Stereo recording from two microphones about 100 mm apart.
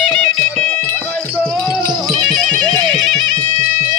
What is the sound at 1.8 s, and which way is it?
Music, 50° right (ahead or behind).